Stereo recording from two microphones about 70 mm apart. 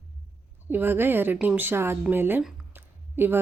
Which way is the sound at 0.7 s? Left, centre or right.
Right.